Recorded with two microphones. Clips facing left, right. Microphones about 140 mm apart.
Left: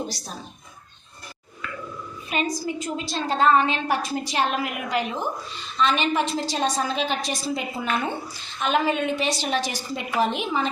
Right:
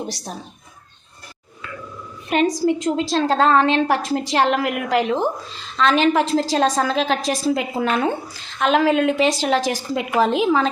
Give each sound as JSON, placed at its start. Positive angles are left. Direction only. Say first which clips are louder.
{"t": 2.3, "sound": "a woman's voice", "louder": "right 9 dB", "side_deg": -80}